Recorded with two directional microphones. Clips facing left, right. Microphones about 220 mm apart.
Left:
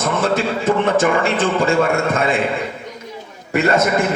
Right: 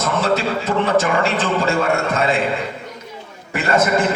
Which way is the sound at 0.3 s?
50° left (ahead or behind).